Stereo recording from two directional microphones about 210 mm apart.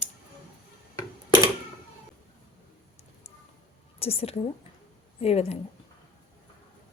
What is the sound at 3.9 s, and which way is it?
A woman's voice, 30° left (ahead or behind).